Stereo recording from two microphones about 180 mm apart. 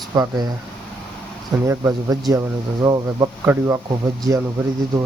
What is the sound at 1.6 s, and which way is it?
Speech, 15° right (ahead or behind).